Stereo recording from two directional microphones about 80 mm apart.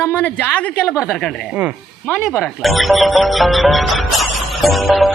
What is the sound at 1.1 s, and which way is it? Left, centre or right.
Speech, centre.